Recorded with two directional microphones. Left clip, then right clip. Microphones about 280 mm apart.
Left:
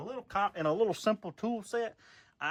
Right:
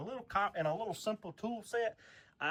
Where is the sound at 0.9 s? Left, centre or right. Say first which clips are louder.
Left 7 dB; left.